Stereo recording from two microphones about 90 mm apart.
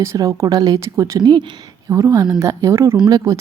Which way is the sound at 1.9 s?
40° right (ahead or behind).